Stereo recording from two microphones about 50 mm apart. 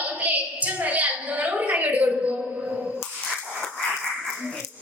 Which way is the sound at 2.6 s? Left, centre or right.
Right.